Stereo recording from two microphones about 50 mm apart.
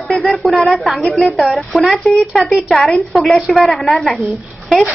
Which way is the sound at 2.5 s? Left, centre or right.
Centre.